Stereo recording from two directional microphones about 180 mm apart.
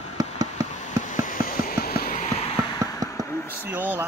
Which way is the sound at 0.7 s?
45° left (ahead or behind).